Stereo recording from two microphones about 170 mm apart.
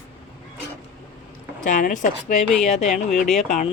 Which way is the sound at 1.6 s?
45° left (ahead or behind).